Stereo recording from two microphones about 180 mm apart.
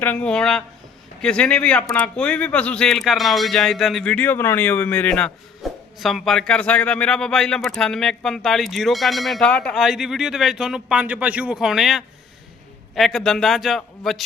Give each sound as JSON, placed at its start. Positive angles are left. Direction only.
{"t": 0.0, "sound": "speech", "side_deg": 10}